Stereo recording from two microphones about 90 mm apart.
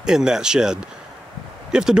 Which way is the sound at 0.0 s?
5° right (ahead or behind).